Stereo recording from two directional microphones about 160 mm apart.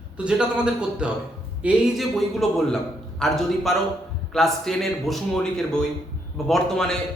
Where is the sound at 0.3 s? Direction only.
5° right (ahead or behind).